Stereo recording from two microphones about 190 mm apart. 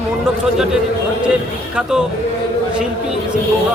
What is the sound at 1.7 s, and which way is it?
Speech, 5° right (ahead or behind).